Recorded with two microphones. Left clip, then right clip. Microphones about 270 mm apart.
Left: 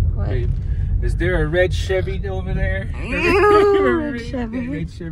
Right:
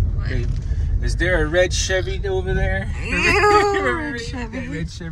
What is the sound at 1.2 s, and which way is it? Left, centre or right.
Speech, right.